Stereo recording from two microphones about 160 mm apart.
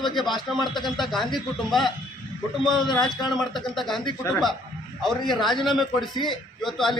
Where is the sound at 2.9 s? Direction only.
25° left (ahead or behind).